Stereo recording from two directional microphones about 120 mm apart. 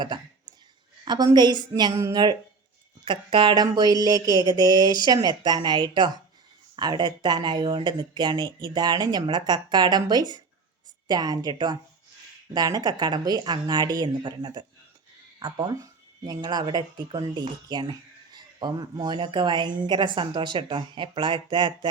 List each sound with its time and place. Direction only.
1.0 s a woman's voice: 35° right (ahead or behind)